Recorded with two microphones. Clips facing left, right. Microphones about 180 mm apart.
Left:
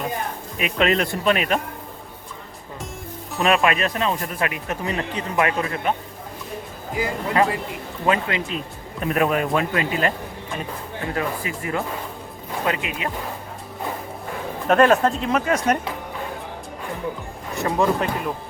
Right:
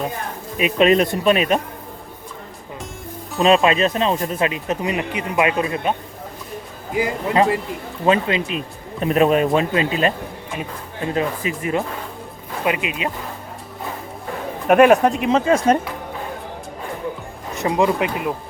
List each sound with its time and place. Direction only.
0.5 s speech: 20° right (ahead or behind)
3.4 s speech: 25° right (ahead or behind)
6.9 s speech: 20° right (ahead or behind)
14.7 s speech: 15° right (ahead or behind)
15.4 s speech: 30° right (ahead or behind)
17.5 s speech: 15° right (ahead or behind)